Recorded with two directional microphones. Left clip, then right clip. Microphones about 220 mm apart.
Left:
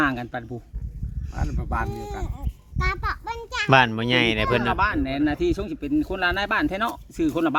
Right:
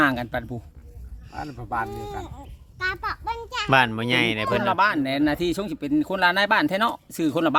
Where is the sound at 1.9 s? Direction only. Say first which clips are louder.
Even; 20° left (ahead or behind).